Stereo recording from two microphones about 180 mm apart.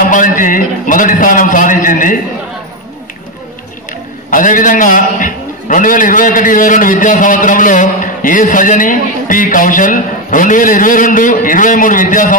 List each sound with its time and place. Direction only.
0.0 s a man's voice: 50° left (ahead or behind)
4.3 s a man's voice: 50° left (ahead or behind)